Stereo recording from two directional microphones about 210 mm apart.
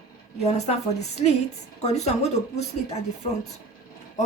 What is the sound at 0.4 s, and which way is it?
Speech, 30° left (ahead or behind).